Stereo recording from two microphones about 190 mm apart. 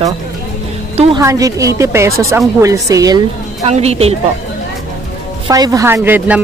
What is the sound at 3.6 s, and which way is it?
Speech, 35° right (ahead or behind).